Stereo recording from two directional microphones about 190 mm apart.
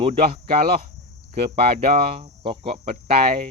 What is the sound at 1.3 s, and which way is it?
Speech, 30° right (ahead or behind).